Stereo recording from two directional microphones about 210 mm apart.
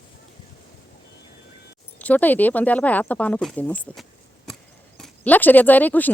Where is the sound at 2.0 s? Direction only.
10° left (ahead or behind).